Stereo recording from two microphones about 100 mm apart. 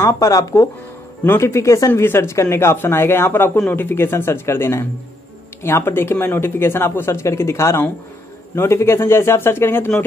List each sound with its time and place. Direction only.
0.0 s speech: 35° left (ahead or behind)
1.2 s speech: 25° left (ahead or behind)